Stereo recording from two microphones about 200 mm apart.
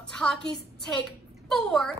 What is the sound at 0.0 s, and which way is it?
Music, 5° left (ahead or behind).